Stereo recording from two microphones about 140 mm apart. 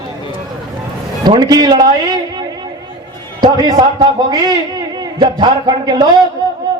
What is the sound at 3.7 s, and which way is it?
A man's voice, 35° right (ahead or behind).